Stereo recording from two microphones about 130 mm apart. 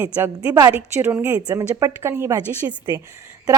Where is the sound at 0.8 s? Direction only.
15° right (ahead or behind).